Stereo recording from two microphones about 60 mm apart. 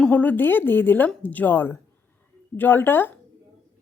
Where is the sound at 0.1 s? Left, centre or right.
Left.